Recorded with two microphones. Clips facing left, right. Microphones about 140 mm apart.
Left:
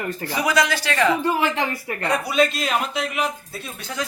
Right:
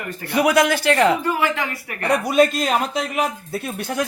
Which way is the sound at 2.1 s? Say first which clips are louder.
Right 4 dB; 45° right (ahead or behind).